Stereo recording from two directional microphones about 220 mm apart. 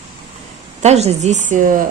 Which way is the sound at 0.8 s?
30° right (ahead or behind).